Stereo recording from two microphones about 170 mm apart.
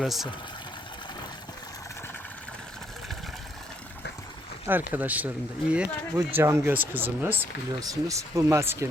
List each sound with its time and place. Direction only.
0.0 s speech: centre (ahead or behind)
4.6 s speech: 10° right (ahead or behind)